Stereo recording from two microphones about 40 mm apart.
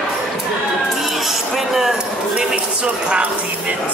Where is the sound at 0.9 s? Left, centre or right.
Centre.